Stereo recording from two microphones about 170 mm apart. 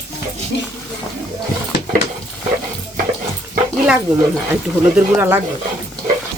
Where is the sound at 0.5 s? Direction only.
90° left.